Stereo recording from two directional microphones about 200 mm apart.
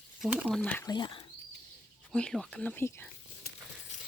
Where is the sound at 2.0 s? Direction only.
5° left (ahead or behind).